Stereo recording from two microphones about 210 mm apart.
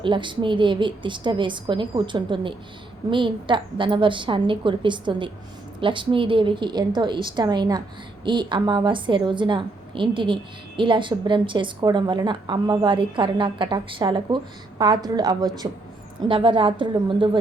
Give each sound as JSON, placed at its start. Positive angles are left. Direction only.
{"t": 0.0, "sound": "a woman's voice", "side_deg": -25}